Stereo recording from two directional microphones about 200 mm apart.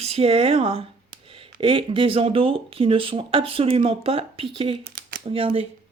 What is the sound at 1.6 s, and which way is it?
Speech, 25° right (ahead or behind).